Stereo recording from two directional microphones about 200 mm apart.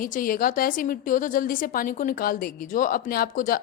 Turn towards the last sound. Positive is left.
turn(degrees=45)  # may be behind; listen again after turning